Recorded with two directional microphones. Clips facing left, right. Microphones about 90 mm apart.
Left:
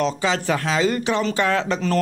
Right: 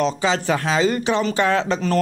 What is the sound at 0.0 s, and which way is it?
Speech, 25° right (ahead or behind).